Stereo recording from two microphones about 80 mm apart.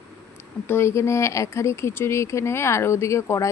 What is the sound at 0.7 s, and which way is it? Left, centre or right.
Speech, left.